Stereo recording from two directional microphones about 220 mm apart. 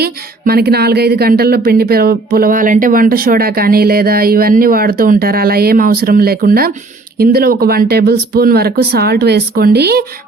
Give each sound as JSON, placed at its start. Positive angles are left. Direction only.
{"t": 0.0, "sound": "speech", "side_deg": -45}